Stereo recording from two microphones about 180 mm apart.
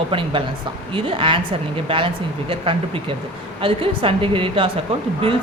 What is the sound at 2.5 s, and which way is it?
A woman's voice, 30° right (ahead or behind).